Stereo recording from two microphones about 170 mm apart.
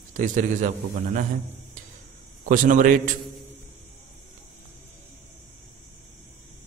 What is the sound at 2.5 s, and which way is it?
Speech, 50° right (ahead or behind).